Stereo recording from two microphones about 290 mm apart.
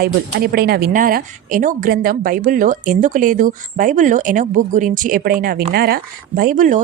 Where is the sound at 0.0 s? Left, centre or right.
Right.